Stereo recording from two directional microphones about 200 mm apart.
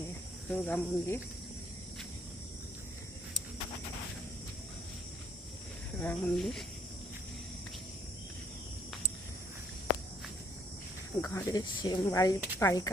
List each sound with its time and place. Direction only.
0.5 s speech: 5° left (ahead or behind)
6.0 s speech: 5° left (ahead or behind)
11.2 s speech: 15° left (ahead or behind)